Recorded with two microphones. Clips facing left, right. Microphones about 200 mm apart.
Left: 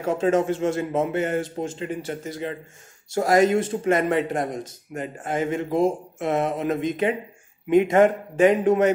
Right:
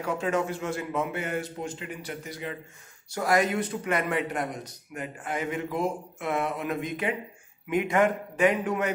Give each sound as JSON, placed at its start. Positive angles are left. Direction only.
{"t": 0.0, "sound": "speech", "side_deg": 25}
{"t": 4.4, "sound": "speech", "side_deg": 45}
{"t": 5.2, "sound": "speech", "side_deg": 25}